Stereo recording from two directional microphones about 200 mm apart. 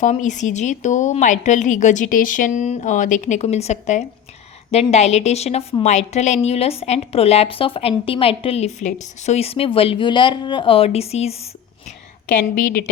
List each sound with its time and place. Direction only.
0.0 s a woman's voice: 40° left (ahead or behind)